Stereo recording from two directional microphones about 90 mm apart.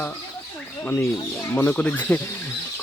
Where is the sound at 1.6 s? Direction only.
20° left (ahead or behind).